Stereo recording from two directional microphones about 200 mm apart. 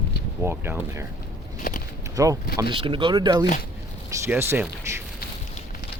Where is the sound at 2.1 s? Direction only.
15° right (ahead or behind).